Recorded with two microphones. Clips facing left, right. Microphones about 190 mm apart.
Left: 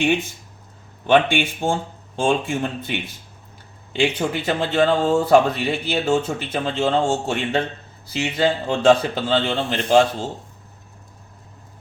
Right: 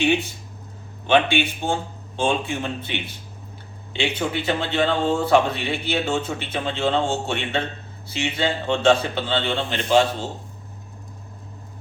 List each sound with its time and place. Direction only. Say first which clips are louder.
1.0 s a man's voice: left 2 dB; 50° left (ahead or behind)